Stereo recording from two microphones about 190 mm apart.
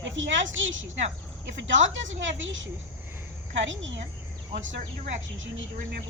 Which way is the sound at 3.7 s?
75° right (ahead or behind).